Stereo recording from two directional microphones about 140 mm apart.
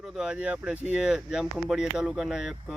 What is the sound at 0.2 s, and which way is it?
Speech, 5° right (ahead or behind).